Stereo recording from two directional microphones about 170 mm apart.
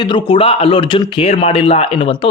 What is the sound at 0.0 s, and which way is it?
A man's voice, 30° left (ahead or behind).